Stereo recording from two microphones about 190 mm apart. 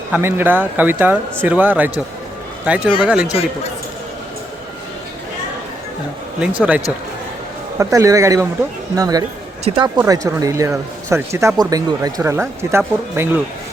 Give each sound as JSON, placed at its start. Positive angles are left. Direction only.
{"t": 0.1, "sound": "speech", "side_deg": -10}
{"t": 6.6, "sound": "speech", "side_deg": -5}